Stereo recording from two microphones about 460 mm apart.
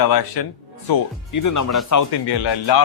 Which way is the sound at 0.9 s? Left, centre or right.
Left.